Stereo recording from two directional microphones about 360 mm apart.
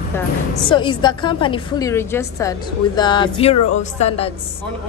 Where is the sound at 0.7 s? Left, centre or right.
Centre.